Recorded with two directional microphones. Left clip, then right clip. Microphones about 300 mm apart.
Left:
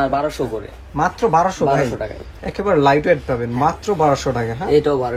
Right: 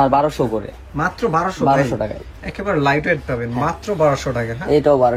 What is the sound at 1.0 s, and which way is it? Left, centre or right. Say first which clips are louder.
Speech: left 3 dB; centre.